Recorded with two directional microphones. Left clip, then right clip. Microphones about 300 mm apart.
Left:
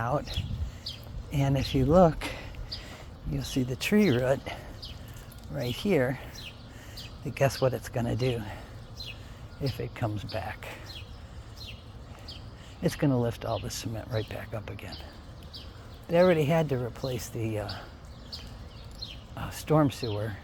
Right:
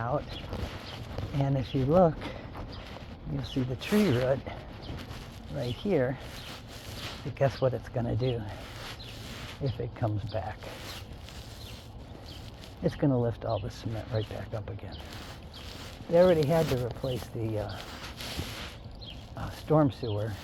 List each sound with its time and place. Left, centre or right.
0.0 s a sound: left
1.4 s speech: left
3.4 s speech: left
5.5 s speech: left
7.3 s speech: left
9.6 s speech: left
12.8 s speech: left
16.1 s speech: left
19.4 s speech: left